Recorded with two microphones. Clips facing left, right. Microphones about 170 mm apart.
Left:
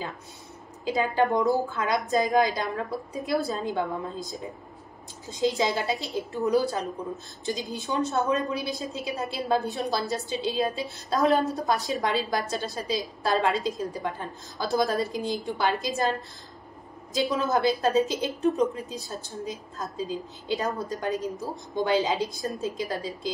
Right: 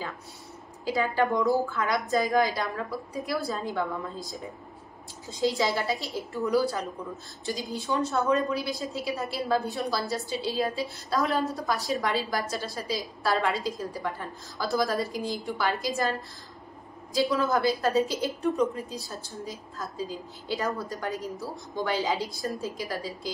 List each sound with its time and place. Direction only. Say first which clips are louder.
0.8 s a woman's voice: left 2 dB; 20° left (ahead or behind)
17.1 s a woman's voice: even; 20° left (ahead or behind)